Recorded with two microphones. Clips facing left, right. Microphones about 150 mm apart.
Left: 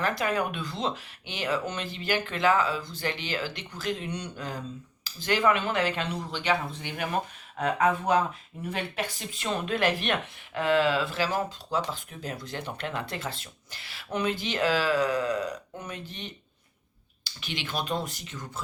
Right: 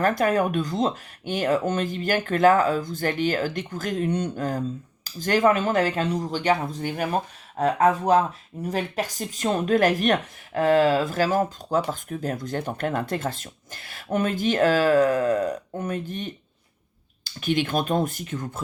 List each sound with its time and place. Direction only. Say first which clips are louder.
0.0 s speech: right 7 dB; 45° right (ahead or behind)